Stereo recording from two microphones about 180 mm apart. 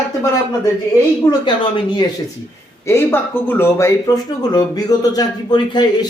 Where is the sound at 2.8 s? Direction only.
15° left (ahead or behind).